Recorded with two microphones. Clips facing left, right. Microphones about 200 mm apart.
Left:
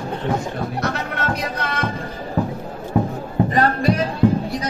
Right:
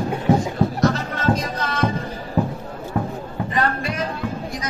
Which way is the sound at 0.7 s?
60° left (ahead or behind).